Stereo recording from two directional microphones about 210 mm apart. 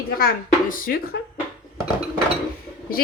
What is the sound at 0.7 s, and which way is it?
Speech, 45° left (ahead or behind).